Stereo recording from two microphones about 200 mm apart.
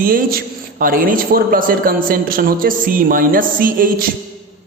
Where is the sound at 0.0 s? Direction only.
45° right (ahead or behind).